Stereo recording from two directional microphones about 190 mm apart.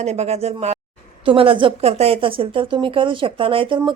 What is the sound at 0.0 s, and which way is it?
Speech, 35° right (ahead or behind).